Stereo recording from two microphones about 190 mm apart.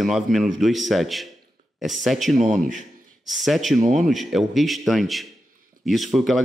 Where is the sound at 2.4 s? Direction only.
45° right (ahead or behind).